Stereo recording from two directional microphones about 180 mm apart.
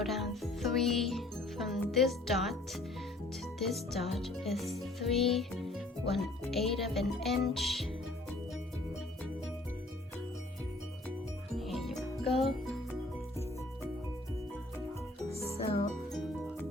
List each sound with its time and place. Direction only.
0.0 s speech: centre (ahead or behind)
3.6 s music: centre (ahead or behind)
11.5 s music: centre (ahead or behind)
15.4 s music: 35° left (ahead or behind)